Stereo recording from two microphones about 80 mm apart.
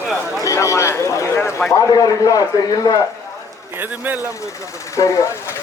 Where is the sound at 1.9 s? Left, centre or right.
Left.